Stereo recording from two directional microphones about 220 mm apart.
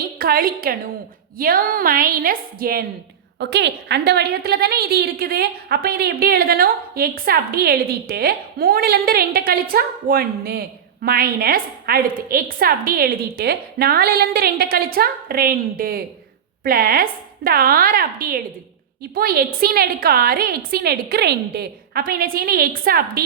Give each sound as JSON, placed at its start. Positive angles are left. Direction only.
{"t": 0.2, "sound": "a woman's voice", "side_deg": -45}